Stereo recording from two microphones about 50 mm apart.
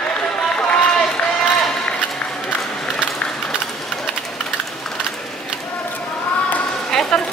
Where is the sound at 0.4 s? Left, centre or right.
Centre.